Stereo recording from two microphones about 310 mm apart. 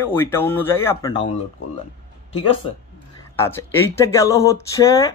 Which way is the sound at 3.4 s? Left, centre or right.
Centre.